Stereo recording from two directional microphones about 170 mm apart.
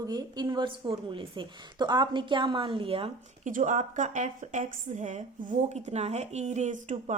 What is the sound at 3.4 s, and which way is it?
Speech, 50° right (ahead or behind).